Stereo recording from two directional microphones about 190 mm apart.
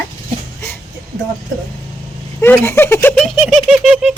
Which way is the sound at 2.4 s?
10° left (ahead or behind).